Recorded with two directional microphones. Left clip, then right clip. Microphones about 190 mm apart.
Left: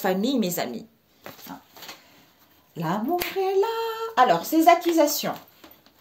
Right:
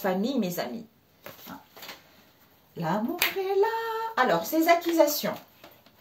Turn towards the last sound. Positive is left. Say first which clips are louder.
# left 2 dB
turn(degrees=50)  # may be behind; listen again after turning